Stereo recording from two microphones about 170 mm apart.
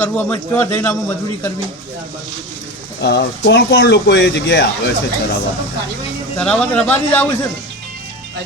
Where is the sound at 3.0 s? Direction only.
85° left.